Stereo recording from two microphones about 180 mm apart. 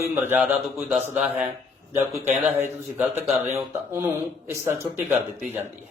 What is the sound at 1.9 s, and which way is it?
Speech, 15° right (ahead or behind).